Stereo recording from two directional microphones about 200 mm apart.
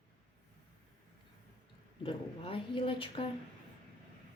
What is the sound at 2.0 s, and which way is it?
Speech, 25° left (ahead or behind).